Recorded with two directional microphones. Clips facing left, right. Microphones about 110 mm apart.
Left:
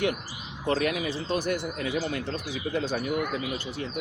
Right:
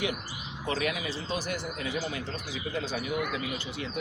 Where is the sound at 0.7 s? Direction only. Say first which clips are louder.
Left 5 dB; 45° left (ahead or behind).